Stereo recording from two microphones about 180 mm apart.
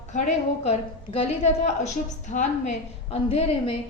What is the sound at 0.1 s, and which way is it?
A woman's voice, 40° left (ahead or behind).